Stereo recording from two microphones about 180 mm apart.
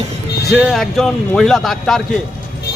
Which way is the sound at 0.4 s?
Centre (ahead or behind).